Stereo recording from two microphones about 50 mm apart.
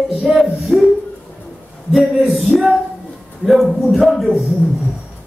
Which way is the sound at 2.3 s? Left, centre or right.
Centre.